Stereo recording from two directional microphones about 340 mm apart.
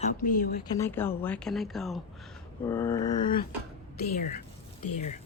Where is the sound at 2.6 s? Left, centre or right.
Centre.